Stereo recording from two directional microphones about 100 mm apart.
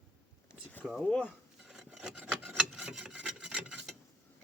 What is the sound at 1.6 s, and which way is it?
Rub, 5° right (ahead or behind).